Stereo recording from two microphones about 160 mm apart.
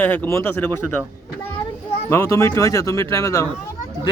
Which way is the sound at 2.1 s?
20° left (ahead or behind).